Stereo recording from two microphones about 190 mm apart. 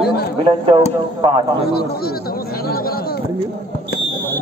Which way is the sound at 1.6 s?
55° left (ahead or behind).